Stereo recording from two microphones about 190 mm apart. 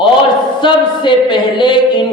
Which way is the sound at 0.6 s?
25° left (ahead or behind).